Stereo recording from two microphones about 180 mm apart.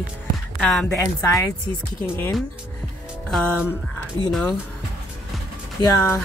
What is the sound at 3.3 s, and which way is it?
Music, 5° right (ahead or behind).